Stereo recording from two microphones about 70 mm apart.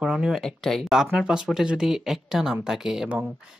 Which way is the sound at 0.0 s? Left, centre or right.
Centre.